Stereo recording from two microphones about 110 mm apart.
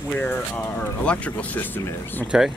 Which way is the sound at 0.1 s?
20° left (ahead or behind).